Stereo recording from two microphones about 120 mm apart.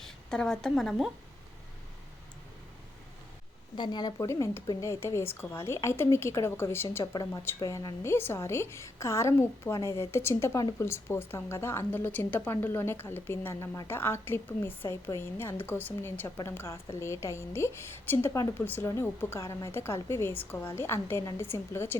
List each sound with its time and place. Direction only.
0.0 s a woman's voice: 5° left (ahead or behind)
3.8 s a woman's voice: 35° left (ahead or behind); by 7.0 s 20° left (ahead or behind)
7.0 s a woman's voice: 35° left (ahead or behind)